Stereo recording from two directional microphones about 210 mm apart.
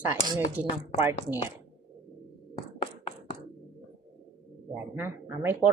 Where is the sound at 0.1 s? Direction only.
10° right (ahead or behind).